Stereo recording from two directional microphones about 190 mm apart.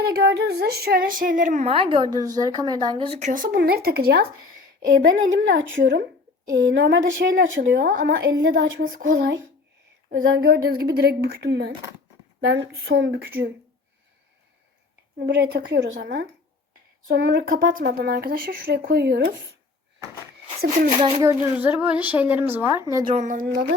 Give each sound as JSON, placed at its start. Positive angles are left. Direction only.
{"t": 0.2, "sound": "a woman's voice", "side_deg": -55}
{"t": 5.0, "sound": "a woman's voice", "side_deg": -80}
{"t": 7.8, "sound": "a woman's voice", "side_deg": -45}
{"t": 8.4, "sound": "a woman's voice", "side_deg": -80}
{"t": 8.8, "sound": "a woman's voice", "side_deg": -45}
{"t": 15.3, "sound": "a woman's voice", "side_deg": -60}
{"t": 20.6, "sound": "a woman's voice", "side_deg": -50}
{"t": 21.2, "sound": "a woman's voice", "side_deg": -15}
{"t": 23.1, "sound": "a woman's voice", "side_deg": -45}